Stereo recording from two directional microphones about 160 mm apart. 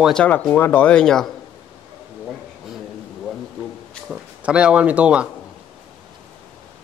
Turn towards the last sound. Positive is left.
turn(degrees=-5)  # may be behind; listen again after turning